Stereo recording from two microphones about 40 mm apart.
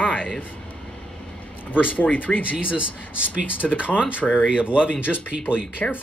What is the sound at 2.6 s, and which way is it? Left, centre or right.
Speech, right.